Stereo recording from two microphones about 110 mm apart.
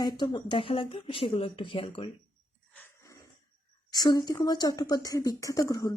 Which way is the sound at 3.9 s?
35° left (ahead or behind).